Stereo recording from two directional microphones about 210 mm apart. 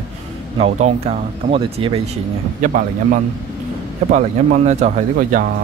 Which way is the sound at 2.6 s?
40° right (ahead or behind).